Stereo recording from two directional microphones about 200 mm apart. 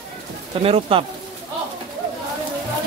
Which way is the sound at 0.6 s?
30° right (ahead or behind).